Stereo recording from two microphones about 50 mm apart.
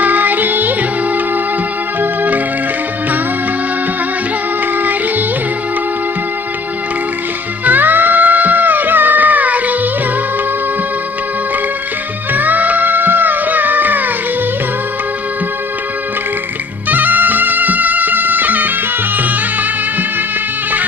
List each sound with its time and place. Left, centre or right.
0.0 s music: right
2.0 s organ: right
4.8 s music: right
7.6 s music: right
12.3 s music: right
16.9 s music: right